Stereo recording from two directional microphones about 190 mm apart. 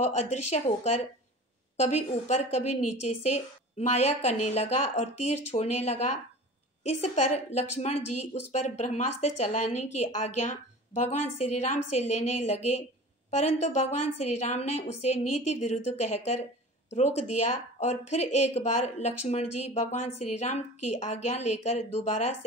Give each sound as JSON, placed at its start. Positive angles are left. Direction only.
{"t": 0.0, "sound": "speech", "side_deg": 35}